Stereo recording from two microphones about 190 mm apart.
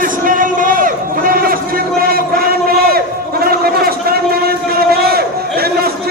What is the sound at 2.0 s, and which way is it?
Crowd, 50° right (ahead or behind).